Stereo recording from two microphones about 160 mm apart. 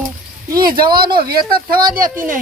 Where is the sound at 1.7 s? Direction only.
65° right (ahead or behind).